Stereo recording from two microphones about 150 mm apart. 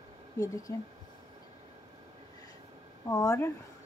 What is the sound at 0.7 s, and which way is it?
Speech, 20° left (ahead or behind).